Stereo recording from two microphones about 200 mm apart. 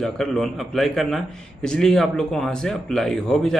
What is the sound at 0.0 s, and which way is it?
A man's voice, 5° left (ahead or behind).